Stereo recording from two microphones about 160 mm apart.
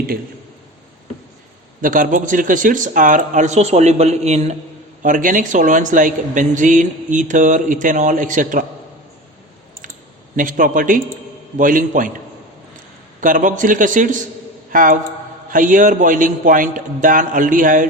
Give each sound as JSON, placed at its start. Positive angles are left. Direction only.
{"t": 1.8, "sound": "a woman's voice", "side_deg": -60}
{"t": 5.0, "sound": "a woman's voice", "side_deg": -55}
{"t": 10.3, "sound": "a man's voice", "side_deg": -55}
{"t": 13.2, "sound": "a man's voice", "side_deg": -55}